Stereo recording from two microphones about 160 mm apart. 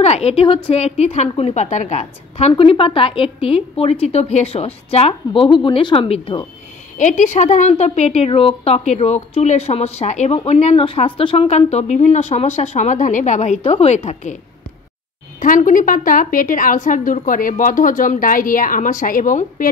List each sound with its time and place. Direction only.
0.0 s a woman's voice: 40° left (ahead or behind)
7.0 s a woman's voice: 50° left (ahead or behind)
15.4 s a woman's voice: 55° left (ahead or behind)